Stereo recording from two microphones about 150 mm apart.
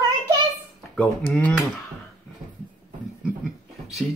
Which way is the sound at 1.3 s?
5° left (ahead or behind).